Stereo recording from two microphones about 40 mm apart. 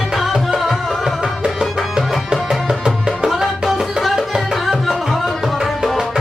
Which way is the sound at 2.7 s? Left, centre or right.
Right.